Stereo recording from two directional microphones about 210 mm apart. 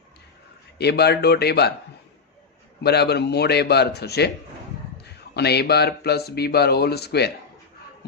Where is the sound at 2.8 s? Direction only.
50° left (ahead or behind).